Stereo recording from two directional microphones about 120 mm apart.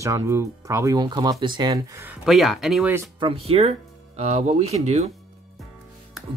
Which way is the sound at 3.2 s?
50° right (ahead or behind).